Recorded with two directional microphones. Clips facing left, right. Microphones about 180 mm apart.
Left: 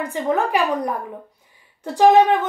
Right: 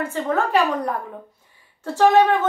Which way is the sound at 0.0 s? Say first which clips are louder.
Left 1 dB; 15° left (ahead or behind).